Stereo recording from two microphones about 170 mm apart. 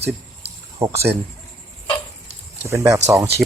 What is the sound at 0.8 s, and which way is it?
Speech, 15° right (ahead or behind).